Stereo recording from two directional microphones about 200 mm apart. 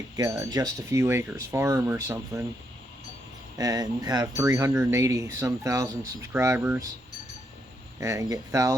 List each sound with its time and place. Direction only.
0.2 s speech: 15° right (ahead or behind)
3.6 s speech: 20° right (ahead or behind)
7.9 s speech: 15° right (ahead or behind)